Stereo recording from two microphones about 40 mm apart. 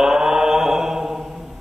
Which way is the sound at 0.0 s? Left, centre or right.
Centre.